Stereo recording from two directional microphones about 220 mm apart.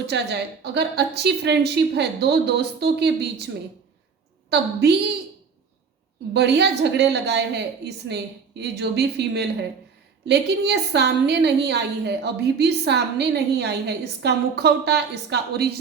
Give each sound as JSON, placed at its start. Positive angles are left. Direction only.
{"t": 0.1, "sound": "a woman's voice", "side_deg": -50}
{"t": 4.4, "sound": "a woman's voice", "side_deg": -50}
{"t": 6.3, "sound": "a woman's voice", "side_deg": -50}